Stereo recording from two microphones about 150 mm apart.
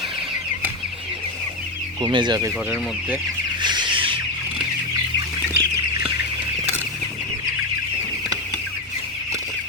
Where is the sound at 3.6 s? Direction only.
30° right (ahead or behind).